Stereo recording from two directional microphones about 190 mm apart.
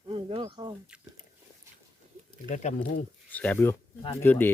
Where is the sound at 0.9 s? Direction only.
5° right (ahead or behind).